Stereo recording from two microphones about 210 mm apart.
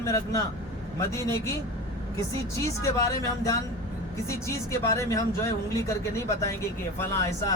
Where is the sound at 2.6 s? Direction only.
15° left (ahead or behind).